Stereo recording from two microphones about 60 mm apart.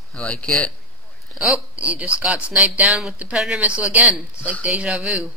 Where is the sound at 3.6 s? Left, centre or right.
Right.